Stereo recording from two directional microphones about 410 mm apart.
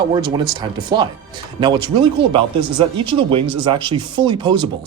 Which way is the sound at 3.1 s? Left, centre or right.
Centre.